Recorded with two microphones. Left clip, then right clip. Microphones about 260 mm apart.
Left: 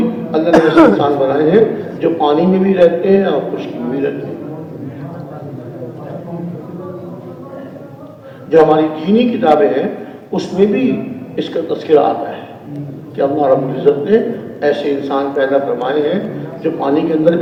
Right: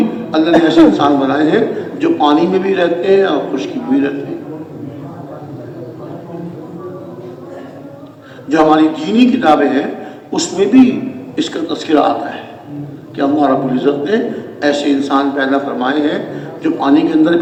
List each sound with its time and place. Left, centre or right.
0.3 s a man's voice: right
8.4 s a man's voice: right